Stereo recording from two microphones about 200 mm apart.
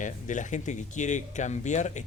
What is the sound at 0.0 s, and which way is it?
Speech, 40° left (ahead or behind).